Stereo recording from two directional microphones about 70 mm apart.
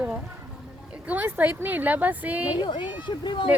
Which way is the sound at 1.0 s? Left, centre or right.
Right.